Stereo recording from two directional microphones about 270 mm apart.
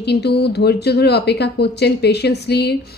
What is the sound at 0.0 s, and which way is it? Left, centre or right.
Speech, left.